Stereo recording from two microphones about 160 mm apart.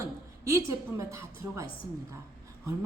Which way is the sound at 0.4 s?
20° right (ahead or behind).